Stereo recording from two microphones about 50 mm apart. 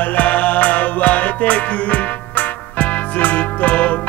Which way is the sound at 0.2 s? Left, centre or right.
Left.